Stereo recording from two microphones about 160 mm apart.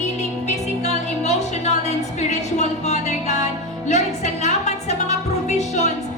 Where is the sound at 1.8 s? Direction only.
45° left (ahead or behind).